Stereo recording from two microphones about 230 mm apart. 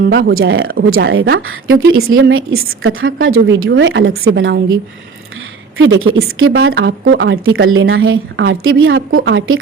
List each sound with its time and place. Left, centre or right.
0.0 s speech: right
0.3 s a woman's voice: right
5.7 s a woman's voice: right